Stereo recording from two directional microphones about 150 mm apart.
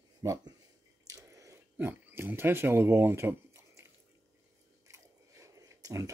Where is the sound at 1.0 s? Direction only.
25° right (ahead or behind).